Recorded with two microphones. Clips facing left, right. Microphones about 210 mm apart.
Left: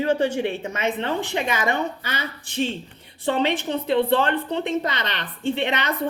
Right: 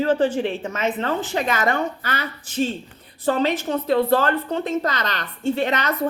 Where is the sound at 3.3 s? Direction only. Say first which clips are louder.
Left 1 dB; 25° left (ahead or behind).